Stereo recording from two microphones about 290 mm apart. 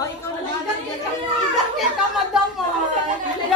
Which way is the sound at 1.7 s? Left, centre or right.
Centre.